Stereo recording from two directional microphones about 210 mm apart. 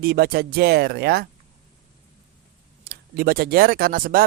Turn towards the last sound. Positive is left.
turn(degrees=-40)  # may be behind; listen again after turning